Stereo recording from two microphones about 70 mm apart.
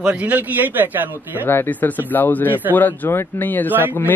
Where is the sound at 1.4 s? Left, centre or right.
Left.